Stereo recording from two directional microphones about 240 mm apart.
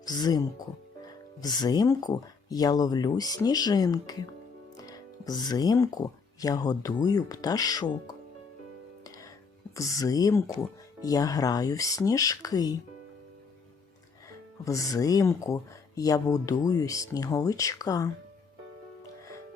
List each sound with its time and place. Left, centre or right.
0.0 s speech: centre
9.0 s music: centre
9.7 s speech: centre
14.6 s speech: centre